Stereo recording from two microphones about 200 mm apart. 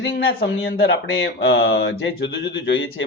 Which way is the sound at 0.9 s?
75° left (ahead or behind).